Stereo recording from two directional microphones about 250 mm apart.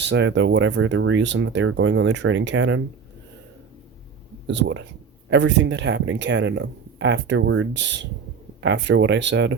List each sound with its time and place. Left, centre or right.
0.0 s speech: right
4.4 s speech: right